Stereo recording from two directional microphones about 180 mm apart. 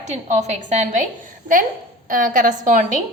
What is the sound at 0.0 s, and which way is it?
A woman's voice, 40° right (ahead or behind).